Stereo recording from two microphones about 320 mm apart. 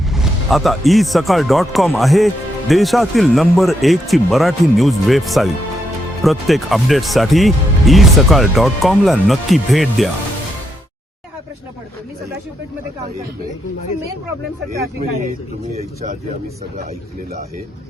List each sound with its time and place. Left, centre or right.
0.1 s speech: centre
15.7 s speech: centre